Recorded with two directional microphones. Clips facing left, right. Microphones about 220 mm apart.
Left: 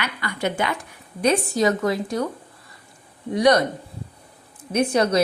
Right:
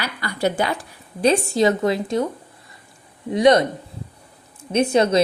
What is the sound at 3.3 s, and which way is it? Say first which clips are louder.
Speech: right 3 dB; 20° right (ahead or behind).